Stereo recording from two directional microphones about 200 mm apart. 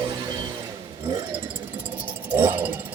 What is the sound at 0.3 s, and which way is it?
Music, 20° right (ahead or behind).